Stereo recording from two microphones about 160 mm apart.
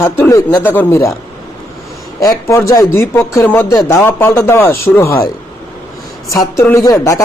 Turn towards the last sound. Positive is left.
turn(degrees=20)  # may be behind; listen again after turning